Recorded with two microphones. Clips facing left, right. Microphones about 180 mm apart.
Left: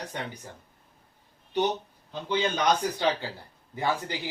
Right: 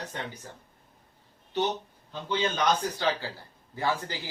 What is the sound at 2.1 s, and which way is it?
A man's voice, 15° left (ahead or behind).